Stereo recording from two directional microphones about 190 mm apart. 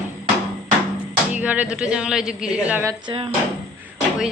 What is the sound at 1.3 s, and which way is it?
A woman's voice, 10° right (ahead or behind).